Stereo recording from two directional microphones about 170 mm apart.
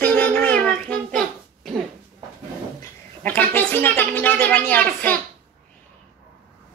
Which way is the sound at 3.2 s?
10° left (ahead or behind).